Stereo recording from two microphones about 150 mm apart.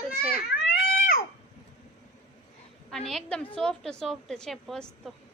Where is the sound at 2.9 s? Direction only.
5° left (ahead or behind).